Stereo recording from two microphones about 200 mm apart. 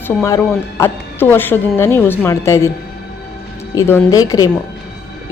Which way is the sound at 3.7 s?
10° left (ahead or behind).